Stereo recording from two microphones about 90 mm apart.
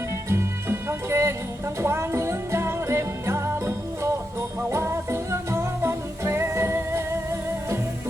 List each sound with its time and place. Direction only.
0.3 s music: 30° right (ahead or behind)
1.8 s jingle bell: 30° right (ahead or behind)